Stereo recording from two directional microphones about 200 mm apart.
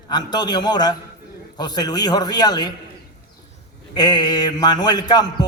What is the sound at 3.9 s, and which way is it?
A man's voice, 20° left (ahead or behind).